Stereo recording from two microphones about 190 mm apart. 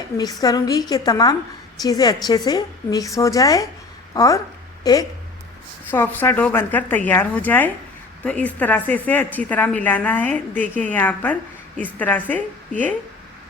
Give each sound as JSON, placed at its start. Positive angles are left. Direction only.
{"t": 0.4, "sound": "a woman's voice", "side_deg": 20}